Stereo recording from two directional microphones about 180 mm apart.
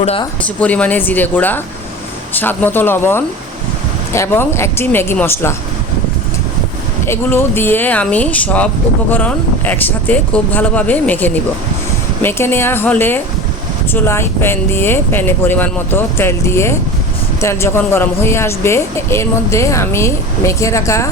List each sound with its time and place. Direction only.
0.0 s speech: 35° left (ahead or behind)
0.4 s speech: 10° left (ahead or behind)
7.1 s speech: 15° left (ahead or behind)